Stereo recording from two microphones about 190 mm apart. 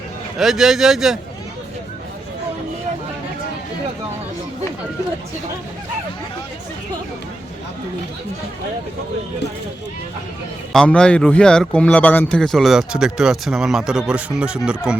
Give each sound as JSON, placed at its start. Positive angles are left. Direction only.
{"t": 0.3, "sound": "speech", "side_deg": 0}
{"t": 10.7, "sound": "speech", "side_deg": 5}